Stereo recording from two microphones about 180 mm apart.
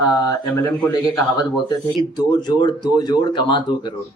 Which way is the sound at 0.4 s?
15° left (ahead or behind).